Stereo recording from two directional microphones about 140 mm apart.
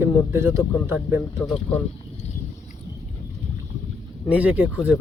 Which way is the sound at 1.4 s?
5° left (ahead or behind).